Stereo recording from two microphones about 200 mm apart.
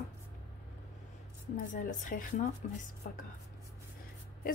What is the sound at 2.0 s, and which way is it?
A woman's voice, 40° left (ahead or behind).